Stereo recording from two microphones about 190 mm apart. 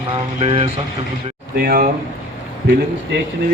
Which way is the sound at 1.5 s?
50° right (ahead or behind).